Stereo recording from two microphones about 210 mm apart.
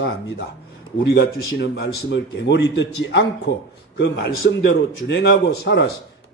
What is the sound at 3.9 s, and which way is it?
A man's voice, 55° left (ahead or behind).